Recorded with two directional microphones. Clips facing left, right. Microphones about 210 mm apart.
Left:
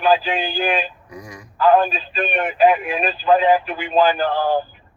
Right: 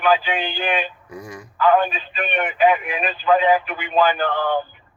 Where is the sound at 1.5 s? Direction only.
35° left (ahead or behind).